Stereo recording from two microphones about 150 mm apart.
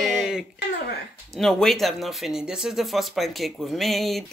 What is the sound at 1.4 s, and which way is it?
Speech, centre (ahead or behind).